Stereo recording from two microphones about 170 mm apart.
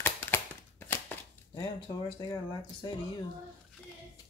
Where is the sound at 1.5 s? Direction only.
25° left (ahead or behind).